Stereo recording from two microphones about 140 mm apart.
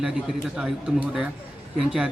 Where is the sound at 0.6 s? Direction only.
10° right (ahead or behind).